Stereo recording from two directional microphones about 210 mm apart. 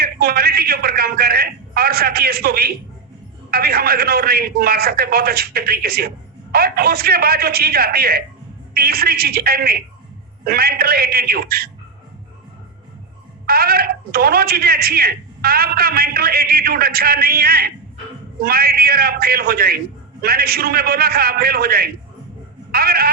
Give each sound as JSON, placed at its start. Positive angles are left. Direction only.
{"t": 0.0, "sound": "a man's voice", "side_deg": -45}
{"t": 13.5, "sound": "a man's voice", "side_deg": -45}